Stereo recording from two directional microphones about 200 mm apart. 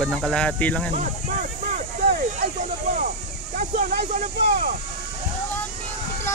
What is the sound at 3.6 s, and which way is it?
Speech, 40° right (ahead or behind).